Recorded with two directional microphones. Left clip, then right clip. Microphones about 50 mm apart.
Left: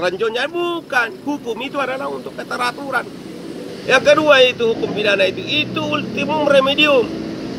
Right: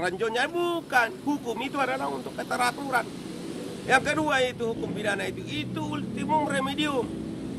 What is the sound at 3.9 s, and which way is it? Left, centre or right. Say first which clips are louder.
Speech: left 12 dB; right.